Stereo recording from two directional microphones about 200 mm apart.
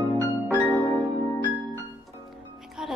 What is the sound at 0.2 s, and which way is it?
Music, 10° left (ahead or behind).